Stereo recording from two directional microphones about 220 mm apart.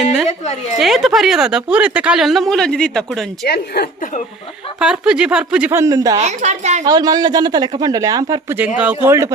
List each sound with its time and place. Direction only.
0.8 s speech: centre (ahead or behind)
3.4 s speech: 45° left (ahead or behind)
4.8 s speech: 5° right (ahead or behind)
6.1 s a woman's voice: 30° right (ahead or behind)
6.8 s speech: 20° right (ahead or behind)